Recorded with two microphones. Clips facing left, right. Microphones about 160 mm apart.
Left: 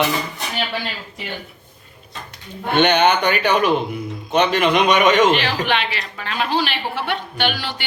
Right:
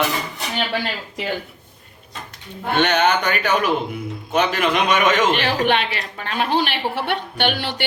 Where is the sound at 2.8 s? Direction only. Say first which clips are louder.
Left 3 dB; centre (ahead or behind).